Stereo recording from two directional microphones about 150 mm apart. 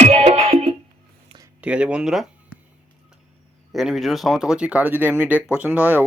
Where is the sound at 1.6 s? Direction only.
10° right (ahead or behind).